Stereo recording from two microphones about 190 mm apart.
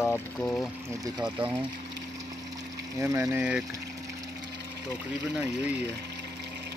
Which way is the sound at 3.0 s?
15° right (ahead or behind).